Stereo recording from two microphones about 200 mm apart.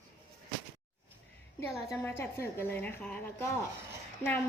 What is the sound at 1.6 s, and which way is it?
A woman's voice, 15° left (ahead or behind).